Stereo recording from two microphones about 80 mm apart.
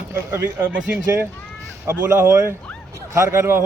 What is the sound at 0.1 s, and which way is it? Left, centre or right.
Speech, right.